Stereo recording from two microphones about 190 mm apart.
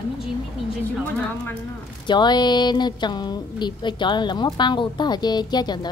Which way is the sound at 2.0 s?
25° left (ahead or behind).